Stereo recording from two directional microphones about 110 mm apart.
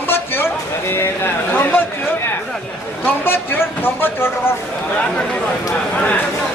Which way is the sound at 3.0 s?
20° left (ahead or behind).